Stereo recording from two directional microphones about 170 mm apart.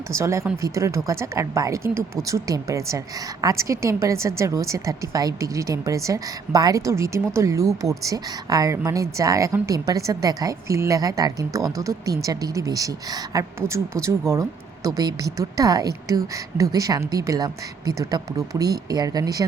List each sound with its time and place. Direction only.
0.1 s a woman's voice: 15° right (ahead or behind)